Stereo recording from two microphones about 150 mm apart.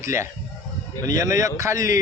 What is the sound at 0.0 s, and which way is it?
A man's voice, 20° right (ahead or behind).